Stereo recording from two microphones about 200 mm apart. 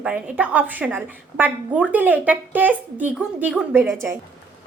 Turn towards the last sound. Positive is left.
turn(degrees=-10)  # may be behind; listen again after turning